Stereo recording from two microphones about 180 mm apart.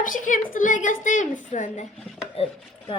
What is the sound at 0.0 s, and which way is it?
A woman's voice, 45° left (ahead or behind).